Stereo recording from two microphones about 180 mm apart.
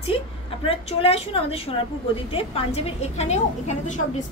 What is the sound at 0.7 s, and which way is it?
A woman's voice, 35° left (ahead or behind).